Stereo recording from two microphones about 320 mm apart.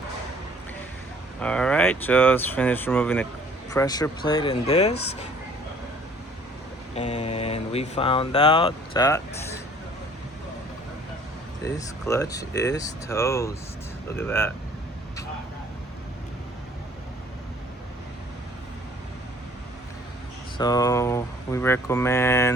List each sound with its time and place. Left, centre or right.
1.4 s speech: centre
6.9 s speech: centre
11.6 s speech: centre
20.6 s speech: centre